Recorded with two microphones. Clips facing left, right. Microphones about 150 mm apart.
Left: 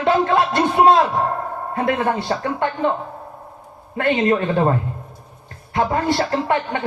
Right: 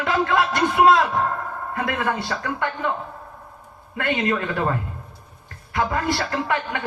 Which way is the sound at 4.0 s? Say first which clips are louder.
Left 5 dB; 25° left (ahead or behind).